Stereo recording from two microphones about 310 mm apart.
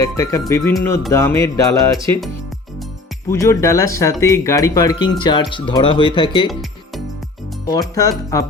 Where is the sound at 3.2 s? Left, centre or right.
Centre.